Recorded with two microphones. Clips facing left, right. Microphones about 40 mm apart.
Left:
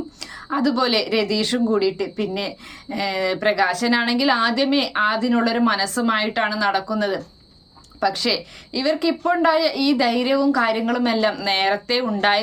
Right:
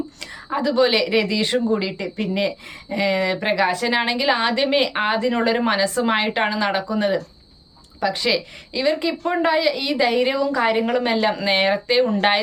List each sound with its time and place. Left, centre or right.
0.5 s speech: right